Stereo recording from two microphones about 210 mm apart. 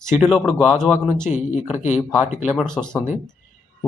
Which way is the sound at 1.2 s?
35° left (ahead or behind).